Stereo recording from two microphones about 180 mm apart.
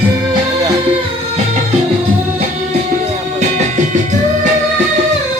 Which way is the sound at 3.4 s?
40° right (ahead or behind).